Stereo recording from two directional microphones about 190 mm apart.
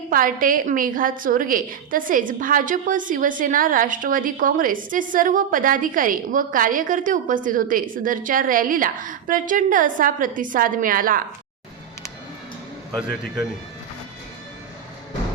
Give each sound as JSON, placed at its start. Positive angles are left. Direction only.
{"t": 0.1, "sound": "a woman's voice", "side_deg": -45}